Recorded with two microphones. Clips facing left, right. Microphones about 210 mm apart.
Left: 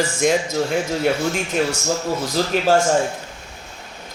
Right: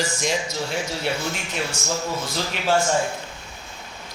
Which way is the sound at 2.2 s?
40° left (ahead or behind).